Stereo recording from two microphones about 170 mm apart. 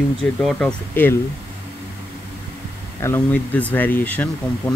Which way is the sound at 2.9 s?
15° left (ahead or behind).